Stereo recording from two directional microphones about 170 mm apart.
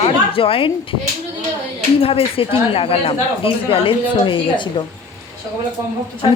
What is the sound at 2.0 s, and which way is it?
Speech, 35° left (ahead or behind).